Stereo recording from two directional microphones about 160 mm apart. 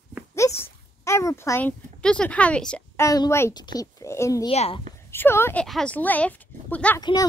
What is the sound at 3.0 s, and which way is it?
Speech, 20° left (ahead or behind).